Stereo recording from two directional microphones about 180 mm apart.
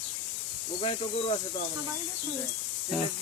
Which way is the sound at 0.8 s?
35° left (ahead or behind).